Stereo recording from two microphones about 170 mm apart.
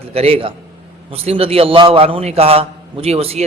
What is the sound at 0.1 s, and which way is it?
A man's voice, 35° right (ahead or behind).